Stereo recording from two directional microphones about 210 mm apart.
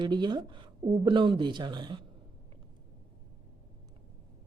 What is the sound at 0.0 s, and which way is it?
A woman's voice, 20° right (ahead or behind).